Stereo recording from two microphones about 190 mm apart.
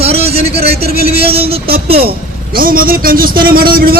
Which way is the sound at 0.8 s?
55° right (ahead or behind).